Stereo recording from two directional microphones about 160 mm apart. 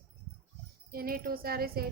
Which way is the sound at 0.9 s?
65° right (ahead or behind).